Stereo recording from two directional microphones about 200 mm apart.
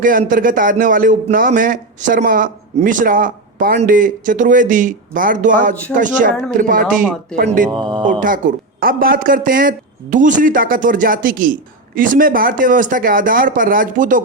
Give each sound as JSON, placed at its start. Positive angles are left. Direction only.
{"t": 0.0, "sound": "speech", "side_deg": -45}
{"t": 7.7, "sound": "speech", "side_deg": -20}
{"t": 8.0, "sound": "speech", "side_deg": -40}